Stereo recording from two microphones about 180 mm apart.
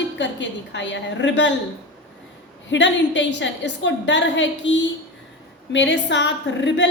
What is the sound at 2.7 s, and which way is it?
A woman's voice, 90° left.